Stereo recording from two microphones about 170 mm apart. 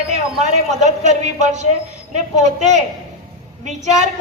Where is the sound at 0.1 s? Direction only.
40° right (ahead or behind).